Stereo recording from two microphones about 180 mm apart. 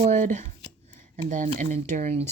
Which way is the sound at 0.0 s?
45° right (ahead or behind).